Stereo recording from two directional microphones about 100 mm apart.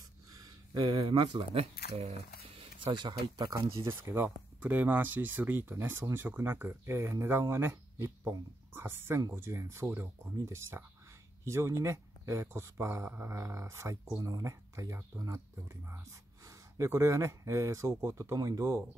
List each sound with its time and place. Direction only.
0.3 s speech: 45° right (ahead or behind); by 2.6 s 80° right
2.8 s speech: 50° right (ahead or behind); by 18.9 s 35° right (ahead or behind)